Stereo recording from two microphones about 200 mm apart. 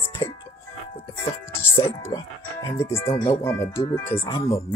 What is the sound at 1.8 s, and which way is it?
Speech, 15° left (ahead or behind).